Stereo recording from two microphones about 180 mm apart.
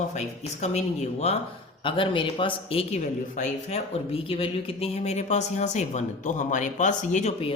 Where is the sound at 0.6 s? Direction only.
40° left (ahead or behind).